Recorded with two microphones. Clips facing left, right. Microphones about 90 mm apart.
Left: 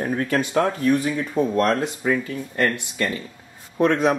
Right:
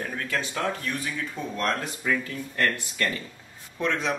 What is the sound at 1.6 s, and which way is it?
Speech, 30° left (ahead or behind).